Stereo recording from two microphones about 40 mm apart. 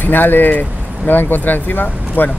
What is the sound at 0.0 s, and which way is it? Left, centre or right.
Speech, left.